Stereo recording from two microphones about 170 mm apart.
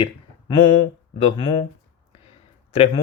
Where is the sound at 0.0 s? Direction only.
30° left (ahead or behind).